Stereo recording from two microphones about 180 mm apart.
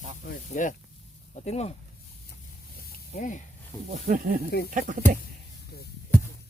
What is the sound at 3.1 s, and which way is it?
Speech, 45° left (ahead or behind).